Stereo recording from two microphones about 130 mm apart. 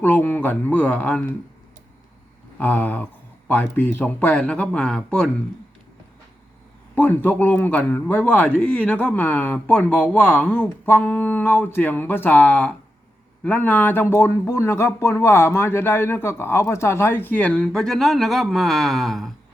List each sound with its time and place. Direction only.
0.0 s speech: 15° left (ahead or behind)
2.6 s speech: 10° left (ahead or behind)
6.9 s speech: 15° left (ahead or behind)